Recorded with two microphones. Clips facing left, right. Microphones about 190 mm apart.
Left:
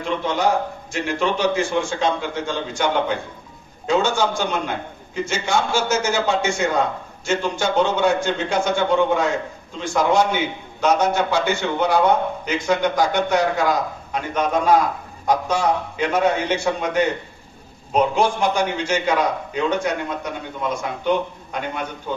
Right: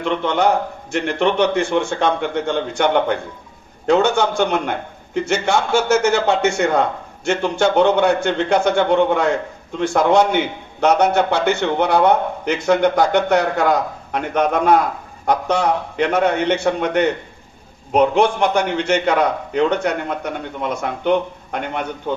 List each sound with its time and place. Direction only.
0.0 s a man's voice: 60° right (ahead or behind)